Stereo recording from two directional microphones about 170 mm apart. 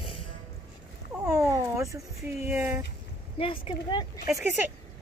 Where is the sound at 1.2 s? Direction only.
20° right (ahead or behind).